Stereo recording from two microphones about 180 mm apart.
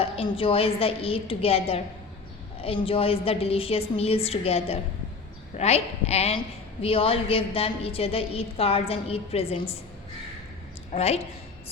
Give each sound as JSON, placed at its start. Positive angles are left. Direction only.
{"t": 0.0, "sound": "a woman's voice", "side_deg": 30}
{"t": 10.9, "sound": "a woman's voice", "side_deg": 35}